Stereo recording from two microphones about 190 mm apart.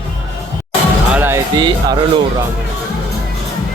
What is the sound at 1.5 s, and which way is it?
Speech, 25° right (ahead or behind).